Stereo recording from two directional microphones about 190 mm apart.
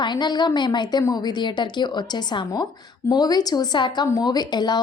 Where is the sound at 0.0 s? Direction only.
25° left (ahead or behind).